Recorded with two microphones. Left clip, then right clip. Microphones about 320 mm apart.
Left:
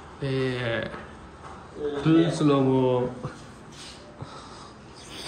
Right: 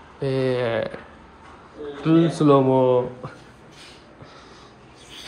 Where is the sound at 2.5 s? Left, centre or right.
Centre.